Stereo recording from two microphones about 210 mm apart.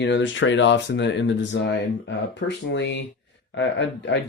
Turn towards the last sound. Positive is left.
turn(degrees=60)  # may be behind; listen again after turning